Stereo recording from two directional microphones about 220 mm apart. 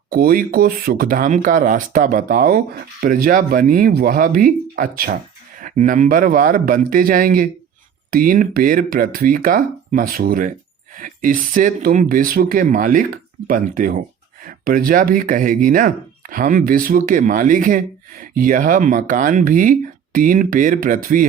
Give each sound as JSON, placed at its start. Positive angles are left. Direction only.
{"t": 0.1, "sound": "speech", "side_deg": -40}